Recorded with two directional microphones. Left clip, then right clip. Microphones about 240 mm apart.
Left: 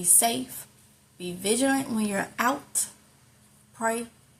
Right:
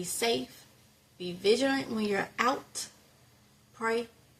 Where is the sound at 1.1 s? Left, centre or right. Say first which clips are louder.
Right 1 dB; centre.